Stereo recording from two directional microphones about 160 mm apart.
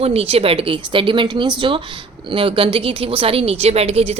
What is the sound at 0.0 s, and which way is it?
A woman's voice, 35° right (ahead or behind).